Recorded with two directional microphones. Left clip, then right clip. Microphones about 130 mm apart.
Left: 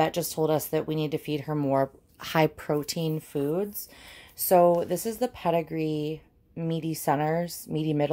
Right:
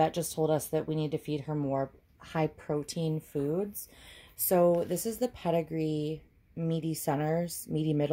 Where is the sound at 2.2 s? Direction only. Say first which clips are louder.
Left 8 dB; 35° left (ahead or behind).